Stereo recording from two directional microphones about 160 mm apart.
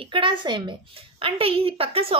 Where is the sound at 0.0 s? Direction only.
30° right (ahead or behind).